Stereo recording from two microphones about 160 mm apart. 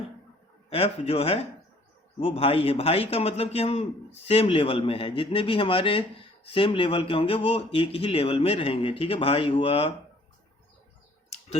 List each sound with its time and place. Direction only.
0.7 s speech: 40° left (ahead or behind)